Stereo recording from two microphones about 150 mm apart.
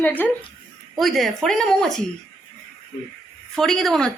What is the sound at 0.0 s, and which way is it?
Speech, 10° left (ahead or behind).